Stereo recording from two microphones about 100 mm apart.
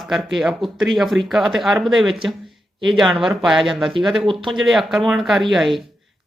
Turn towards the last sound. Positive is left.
turn(degrees=0)  # may be behind; listen again after turning